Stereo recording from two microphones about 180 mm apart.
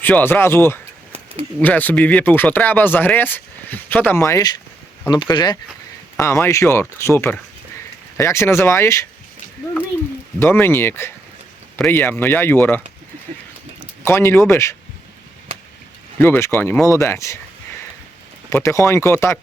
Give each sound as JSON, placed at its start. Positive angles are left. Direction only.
{"t": 0.0, "sound": "speech", "side_deg": 10}
{"t": 10.4, "sound": "speech", "side_deg": 10}
{"t": 16.1, "sound": "speech", "side_deg": 10}
{"t": 18.5, "sound": "speech", "side_deg": 15}